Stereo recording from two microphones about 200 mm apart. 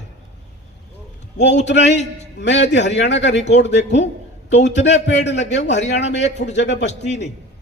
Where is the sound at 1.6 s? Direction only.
60° left (ahead or behind).